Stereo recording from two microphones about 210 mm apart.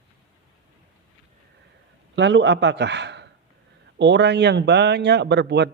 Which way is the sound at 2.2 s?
60° right (ahead or behind).